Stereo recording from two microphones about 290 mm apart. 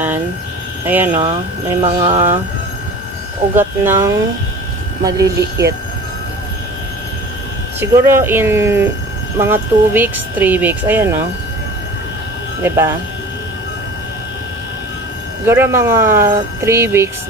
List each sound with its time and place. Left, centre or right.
0.8 s speech: centre
1.8 s speech: centre
3.5 s speech: centre
7.8 s speech: centre
12.6 s speech: centre
15.4 s speech: centre